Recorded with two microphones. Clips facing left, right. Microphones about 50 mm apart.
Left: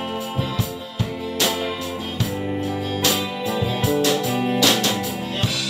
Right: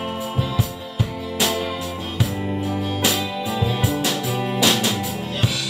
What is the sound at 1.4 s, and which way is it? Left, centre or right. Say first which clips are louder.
Music: right 1 dB; centre.